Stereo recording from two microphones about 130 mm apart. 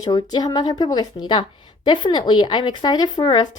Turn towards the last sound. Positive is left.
turn(degrees=35)  # may be behind; listen again after turning